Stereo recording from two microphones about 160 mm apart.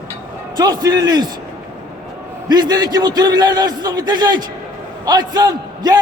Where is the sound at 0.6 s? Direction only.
25° right (ahead or behind).